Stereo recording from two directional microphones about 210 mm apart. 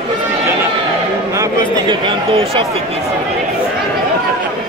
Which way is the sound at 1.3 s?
20° right (ahead or behind).